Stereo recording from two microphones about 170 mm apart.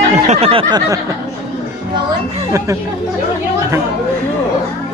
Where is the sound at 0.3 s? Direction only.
35° right (ahead or behind).